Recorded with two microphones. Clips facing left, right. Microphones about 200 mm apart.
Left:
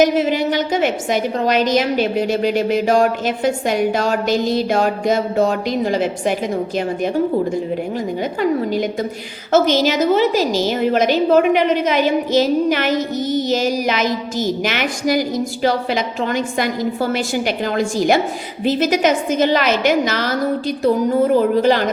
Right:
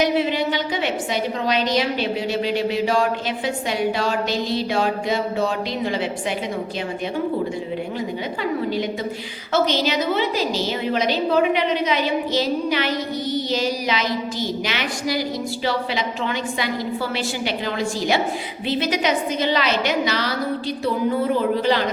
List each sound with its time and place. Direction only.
0.0 s a woman's voice: 45° left (ahead or behind)
7.9 s a woman's voice: 45° left (ahead or behind)